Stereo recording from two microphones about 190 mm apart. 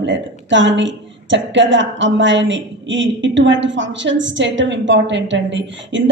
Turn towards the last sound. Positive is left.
turn(degrees=-75)  # may be behind; listen again after turning